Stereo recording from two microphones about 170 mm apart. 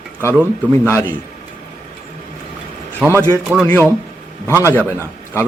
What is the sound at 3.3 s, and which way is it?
Speech, 5° right (ahead or behind).